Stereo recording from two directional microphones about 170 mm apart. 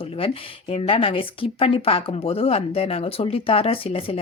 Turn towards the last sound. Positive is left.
turn(degrees=35)  # may be behind; listen again after turning